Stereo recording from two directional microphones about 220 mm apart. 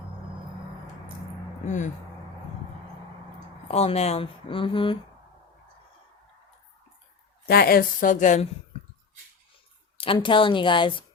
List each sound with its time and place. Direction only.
1.6 s speech: 35° left (ahead or behind)
3.7 s speech: 30° left (ahead or behind)
7.4 s speech: 45° left (ahead or behind)
10.0 s speech: 25° left (ahead or behind)